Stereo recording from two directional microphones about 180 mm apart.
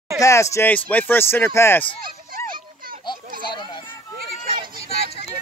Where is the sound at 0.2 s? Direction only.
15° left (ahead or behind).